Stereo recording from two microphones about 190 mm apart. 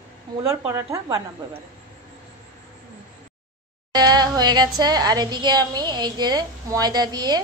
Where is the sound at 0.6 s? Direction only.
15° right (ahead or behind).